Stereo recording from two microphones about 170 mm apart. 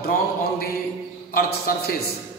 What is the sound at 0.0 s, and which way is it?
Mantra, 65° left (ahead or behind).